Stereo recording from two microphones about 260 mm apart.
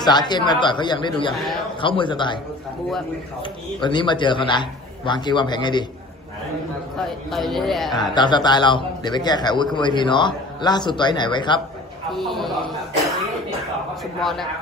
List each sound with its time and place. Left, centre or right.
0.0 s a man's voice: centre
3.4 s a man's voice: centre
7.3 s speech: centre
7.9 s a man's voice: centre
12.1 s speech: centre
14.0 s speech: centre